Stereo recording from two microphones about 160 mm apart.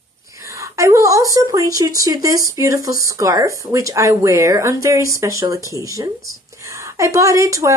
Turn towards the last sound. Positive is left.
turn(degrees=-20)  # may be behind; listen again after turning